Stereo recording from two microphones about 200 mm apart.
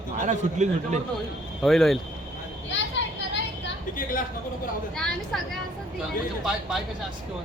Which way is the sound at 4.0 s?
45° left (ahead or behind).